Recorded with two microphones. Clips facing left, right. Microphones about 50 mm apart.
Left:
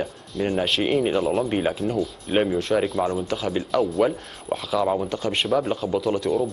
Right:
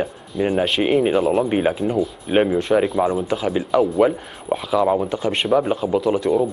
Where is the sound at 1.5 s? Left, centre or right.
Centre.